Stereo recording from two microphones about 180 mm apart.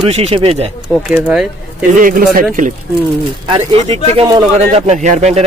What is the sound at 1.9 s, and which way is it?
Speech, 50° right (ahead or behind).